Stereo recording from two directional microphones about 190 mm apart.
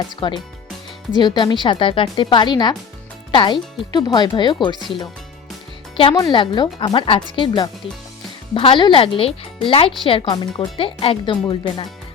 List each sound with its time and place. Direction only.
0.2 s speech: 25° left (ahead or behind)
6.0 s speech: 25° left (ahead or behind)